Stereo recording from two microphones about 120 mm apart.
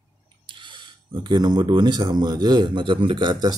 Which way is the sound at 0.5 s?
40° right (ahead or behind).